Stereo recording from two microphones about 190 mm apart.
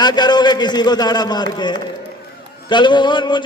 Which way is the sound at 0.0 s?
20° left (ahead or behind).